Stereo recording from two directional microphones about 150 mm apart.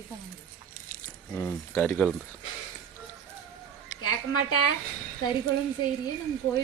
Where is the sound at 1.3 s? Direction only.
15° left (ahead or behind).